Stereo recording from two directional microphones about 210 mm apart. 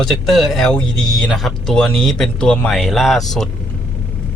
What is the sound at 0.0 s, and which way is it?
Speech, centre (ahead or behind).